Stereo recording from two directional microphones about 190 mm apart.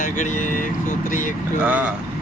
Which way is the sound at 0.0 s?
40° left (ahead or behind).